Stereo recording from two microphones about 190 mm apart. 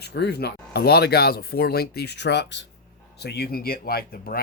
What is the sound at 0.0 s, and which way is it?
Speech, 60° left (ahead or behind).